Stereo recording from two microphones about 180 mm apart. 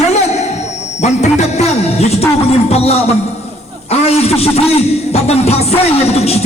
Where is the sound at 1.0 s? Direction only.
40° left (ahead or behind).